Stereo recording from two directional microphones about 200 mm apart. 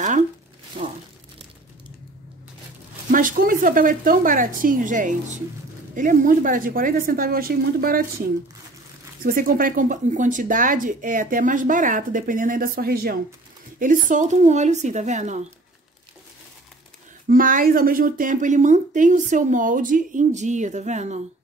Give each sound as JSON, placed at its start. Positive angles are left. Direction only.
{"t": 0.8, "sound": "crumpling", "side_deg": -30}
{"t": 3.1, "sound": "a woman's voice", "side_deg": -40}
{"t": 9.2, "sound": "speech", "side_deg": -45}
{"t": 17.3, "sound": "speech", "side_deg": -45}